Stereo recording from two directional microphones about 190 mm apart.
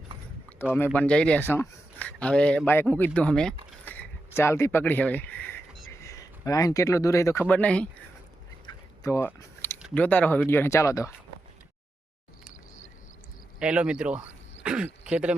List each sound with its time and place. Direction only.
0.6 s speech: 10° left (ahead or behind)
8.6 s drip: 15° left (ahead or behind)
9.9 s speech: 10° left (ahead or behind)
13.6 s speech: 5° right (ahead or behind)